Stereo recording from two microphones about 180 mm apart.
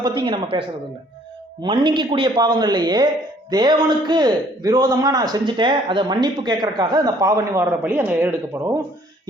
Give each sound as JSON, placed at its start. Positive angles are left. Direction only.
{"t": 0.3, "sound": "a man's voice", "side_deg": -30}
{"t": 1.6, "sound": "a man's voice", "side_deg": -25}